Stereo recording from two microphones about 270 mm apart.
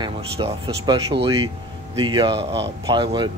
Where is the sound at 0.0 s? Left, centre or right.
Centre.